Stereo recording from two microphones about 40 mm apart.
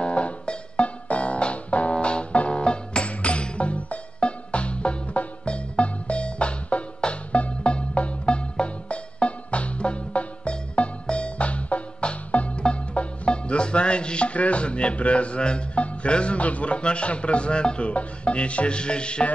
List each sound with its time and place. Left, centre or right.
0.0 s music: left